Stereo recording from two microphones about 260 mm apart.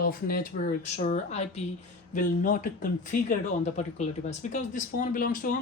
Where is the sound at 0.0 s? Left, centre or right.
Left.